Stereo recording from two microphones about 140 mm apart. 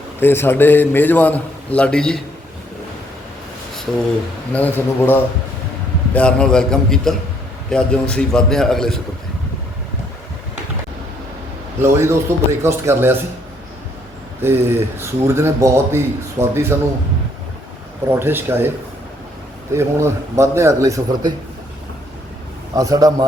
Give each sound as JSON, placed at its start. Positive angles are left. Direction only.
{"t": 0.2, "sound": "a man's voice", "side_deg": 15}
{"t": 4.5, "sound": "a man's voice", "side_deg": 15}
{"t": 6.1, "sound": "a man's voice", "side_deg": 5}
{"t": 11.8, "sound": "speech", "side_deg": -20}
{"t": 14.4, "sound": "speech", "side_deg": -15}
{"t": 18.1, "sound": "speech", "side_deg": -15}
{"t": 19.7, "sound": "speech", "side_deg": -20}
{"t": 22.7, "sound": "speech", "side_deg": -25}